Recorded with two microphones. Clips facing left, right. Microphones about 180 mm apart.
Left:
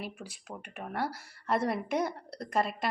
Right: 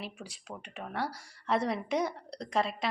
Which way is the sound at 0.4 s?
5° left (ahead or behind).